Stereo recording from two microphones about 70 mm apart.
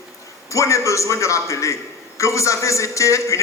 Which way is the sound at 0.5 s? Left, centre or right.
Left.